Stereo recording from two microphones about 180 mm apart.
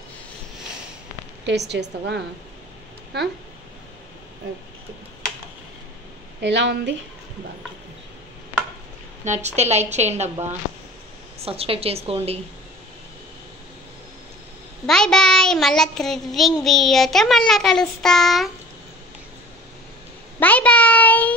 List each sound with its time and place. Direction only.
1.7 s a woman's voice: 70° right (ahead or behind)
6.4 s a woman's voice: 75° right (ahead or behind)
9.2 s a woman's voice: 40° right (ahead or behind)
11.3 s a woman's voice: 35° right (ahead or behind)
14.9 s child singing: 5° left (ahead or behind)
20.3 s a sound: 10° left (ahead or behind)